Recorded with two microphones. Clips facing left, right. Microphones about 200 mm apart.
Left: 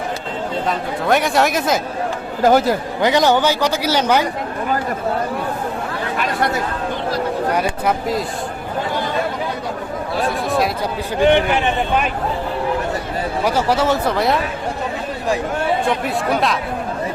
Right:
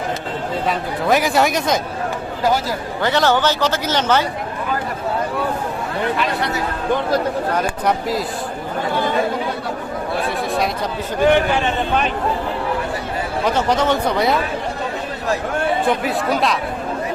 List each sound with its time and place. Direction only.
0.7 s speech: centre (ahead or behind)
2.4 s speech: 55° left (ahead or behind)
3.0 s a man's voice: 15° left (ahead or behind)
6.1 s chatter: 50° left (ahead or behind)
7.5 s a sound: 10° left (ahead or behind)
10.2 s a sound: centre (ahead or behind)
11.2 s a man's voice: 20° left (ahead or behind)
13.4 s speech: 10° left (ahead or behind)
16.0 s speech: centre (ahead or behind)